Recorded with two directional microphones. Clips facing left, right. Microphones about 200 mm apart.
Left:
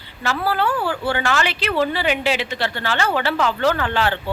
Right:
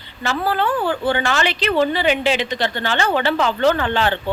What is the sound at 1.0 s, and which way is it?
A woman's voice, 10° left (ahead or behind).